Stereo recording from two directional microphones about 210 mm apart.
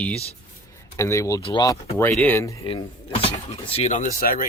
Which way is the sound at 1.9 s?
10° left (ahead or behind).